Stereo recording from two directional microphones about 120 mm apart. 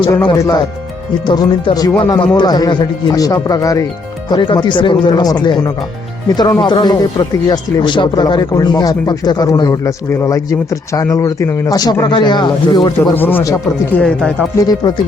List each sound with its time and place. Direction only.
0.3 s speech: 30° left (ahead or behind)
1.2 s speech: 40° left (ahead or behind)
4.3 s speech: 40° left (ahead or behind)
13.1 s speech: 15° left (ahead or behind)
14.6 s speech: 35° left (ahead or behind)